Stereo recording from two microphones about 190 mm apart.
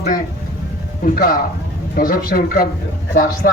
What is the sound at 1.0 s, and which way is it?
A man's voice, 50° left (ahead or behind).